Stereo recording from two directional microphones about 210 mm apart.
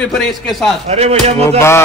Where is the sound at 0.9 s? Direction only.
30° right (ahead or behind).